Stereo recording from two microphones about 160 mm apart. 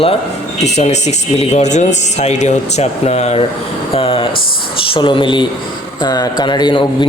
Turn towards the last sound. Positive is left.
turn(degrees=30)  # may be behind; listen again after turning